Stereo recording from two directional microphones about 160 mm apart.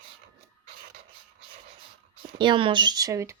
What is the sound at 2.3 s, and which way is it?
Speech, 30° right (ahead or behind).